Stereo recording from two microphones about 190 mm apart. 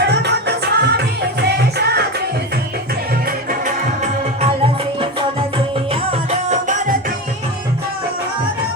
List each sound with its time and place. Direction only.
0.1 s music: 60° right (ahead or behind)
5.9 s music: 35° right (ahead or behind)